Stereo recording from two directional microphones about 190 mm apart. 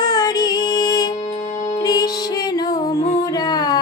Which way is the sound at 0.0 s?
20° left (ahead or behind).